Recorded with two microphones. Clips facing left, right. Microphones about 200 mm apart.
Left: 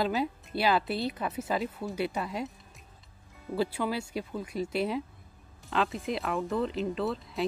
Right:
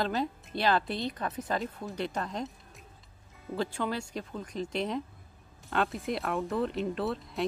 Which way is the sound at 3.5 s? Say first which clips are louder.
Left 2 dB; 5° left (ahead or behind).